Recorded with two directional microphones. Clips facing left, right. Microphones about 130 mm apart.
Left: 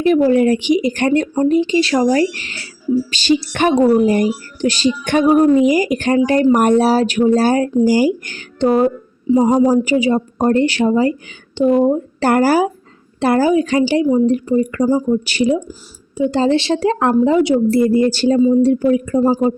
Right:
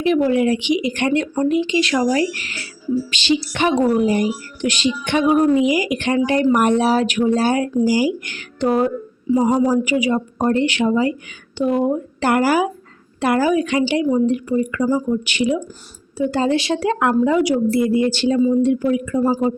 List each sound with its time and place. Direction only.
0.0 s a woman's voice: 40° left (ahead or behind)
8.3 s a woman's voice: 30° left (ahead or behind)
9.3 s a woman's voice: 20° left (ahead or behind); by 11.1 s 40° left (ahead or behind)
11.5 s a woman's voice: 30° left (ahead or behind)
16.1 s a woman's voice: 20° left (ahead or behind)